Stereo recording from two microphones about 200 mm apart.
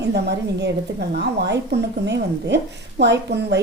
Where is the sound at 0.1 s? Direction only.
55° right (ahead or behind).